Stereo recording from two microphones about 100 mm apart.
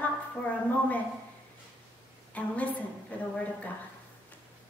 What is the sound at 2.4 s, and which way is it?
Speech, 15° left (ahead or behind).